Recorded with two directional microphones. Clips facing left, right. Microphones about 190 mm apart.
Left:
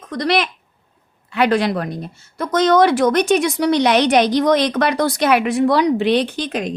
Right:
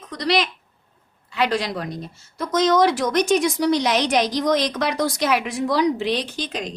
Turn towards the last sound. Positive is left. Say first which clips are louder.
# left 6 dB
turn(degrees=55)  # may be behind; listen again after turning